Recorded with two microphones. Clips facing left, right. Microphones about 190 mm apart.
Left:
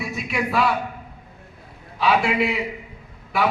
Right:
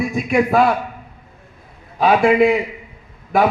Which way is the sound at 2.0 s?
45° right (ahead or behind).